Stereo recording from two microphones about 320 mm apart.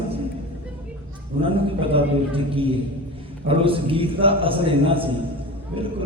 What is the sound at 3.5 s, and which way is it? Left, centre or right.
A man's voice, centre.